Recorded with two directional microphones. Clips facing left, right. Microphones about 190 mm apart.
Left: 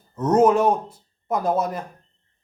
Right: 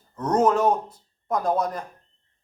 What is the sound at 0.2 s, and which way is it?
A man's voice, 10° left (ahead or behind).